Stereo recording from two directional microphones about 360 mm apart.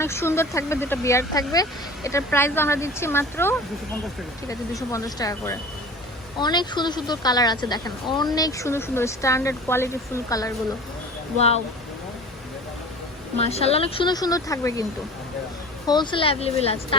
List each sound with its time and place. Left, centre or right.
0.0 s a woman's voice: centre
13.4 s a woman's voice: centre
15.9 s a woman's voice: centre